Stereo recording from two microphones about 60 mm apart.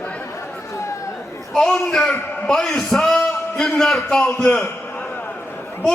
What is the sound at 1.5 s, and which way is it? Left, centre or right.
A man's voice, centre.